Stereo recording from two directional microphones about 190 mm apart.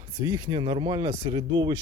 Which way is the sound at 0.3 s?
20° right (ahead or behind).